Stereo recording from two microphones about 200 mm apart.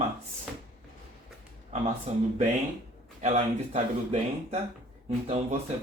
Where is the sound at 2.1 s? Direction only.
35° right (ahead or behind).